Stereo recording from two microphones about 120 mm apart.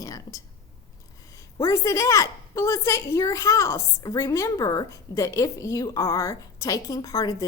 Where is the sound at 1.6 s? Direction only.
25° left (ahead or behind).